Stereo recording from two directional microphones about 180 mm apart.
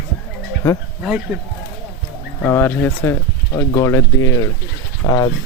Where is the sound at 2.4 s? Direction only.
10° left (ahead or behind).